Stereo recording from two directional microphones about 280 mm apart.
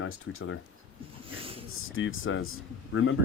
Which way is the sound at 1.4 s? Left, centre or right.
Centre.